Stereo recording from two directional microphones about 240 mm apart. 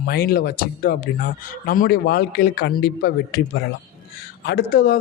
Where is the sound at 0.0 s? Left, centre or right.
Left.